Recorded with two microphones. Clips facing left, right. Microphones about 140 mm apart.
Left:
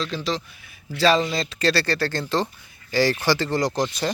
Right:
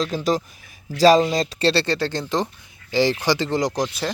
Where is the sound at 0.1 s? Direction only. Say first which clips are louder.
Right 5 dB; 45° right (ahead or behind).